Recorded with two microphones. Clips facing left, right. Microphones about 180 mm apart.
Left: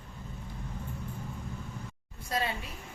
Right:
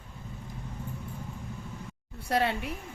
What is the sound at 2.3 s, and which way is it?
Speech, 70° right (ahead or behind).